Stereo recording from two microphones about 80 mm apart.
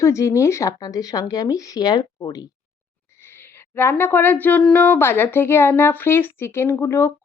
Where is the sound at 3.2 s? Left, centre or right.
Left.